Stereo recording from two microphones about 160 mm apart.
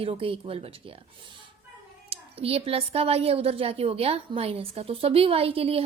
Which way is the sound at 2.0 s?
35° right (ahead or behind).